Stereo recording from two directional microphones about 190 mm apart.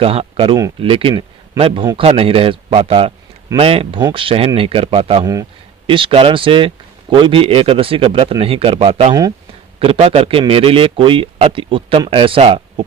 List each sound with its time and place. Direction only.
0.0 s speech: 30° right (ahead or behind)
5.2 s speech: 20° right (ahead or behind)